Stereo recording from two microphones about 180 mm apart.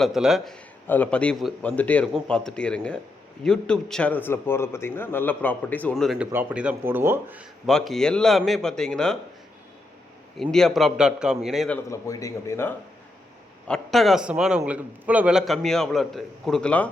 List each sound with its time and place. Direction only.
0.0 s a man's voice: centre (ahead or behind)
6.3 s speech: 10° right (ahead or behind)
7.7 s a man's voice: 5° left (ahead or behind)
10.5 s a man's voice: centre (ahead or behind)
11.9 s a man's voice: 20° left (ahead or behind)
13.7 s a man's voice: centre (ahead or behind)